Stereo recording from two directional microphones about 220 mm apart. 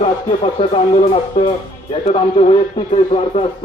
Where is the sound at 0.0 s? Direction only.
25° left (ahead or behind).